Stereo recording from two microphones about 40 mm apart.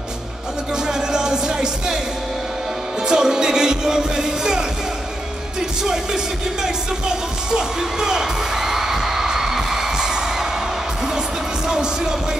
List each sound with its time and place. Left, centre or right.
0.8 s music: centre
3.1 s music: centre
5.9 s music: centre
11.6 s a sound: centre